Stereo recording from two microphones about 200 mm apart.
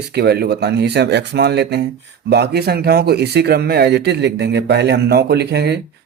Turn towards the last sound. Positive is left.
turn(degrees=-55)  # may be behind; listen again after turning